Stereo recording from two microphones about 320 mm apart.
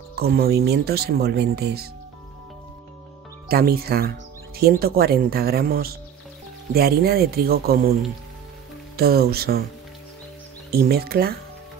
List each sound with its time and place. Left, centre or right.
0.1 s speech: right
3.4 s speech: right
8.9 s speech: right
10.7 s speech: right